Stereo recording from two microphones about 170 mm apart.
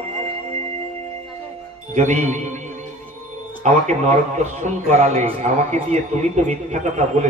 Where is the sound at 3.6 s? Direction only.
45° right (ahead or behind).